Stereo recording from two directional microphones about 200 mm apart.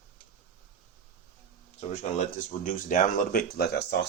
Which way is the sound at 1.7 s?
35° left (ahead or behind).